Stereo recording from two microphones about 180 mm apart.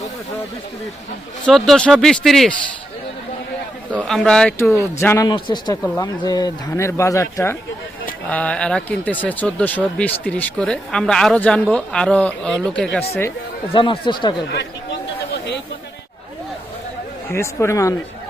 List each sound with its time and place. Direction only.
1.5 s speech: 5° left (ahead or behind)
3.9 s speech: 5° left (ahead or behind)
5.3 s speech: 25° left (ahead or behind); by 13.1 s 5° left (ahead or behind)
13.7 s speech: 25° left (ahead or behind)
14.5 s chatter: 70° left (ahead or behind)
17.3 s speech: 15° left (ahead or behind)